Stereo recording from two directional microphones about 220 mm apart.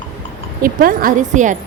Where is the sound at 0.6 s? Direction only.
40° right (ahead or behind).